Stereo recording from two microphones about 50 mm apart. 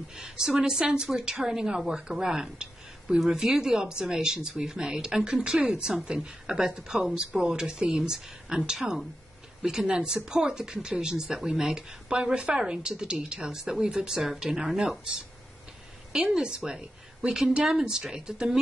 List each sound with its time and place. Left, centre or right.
0.1 s a woman's voice: centre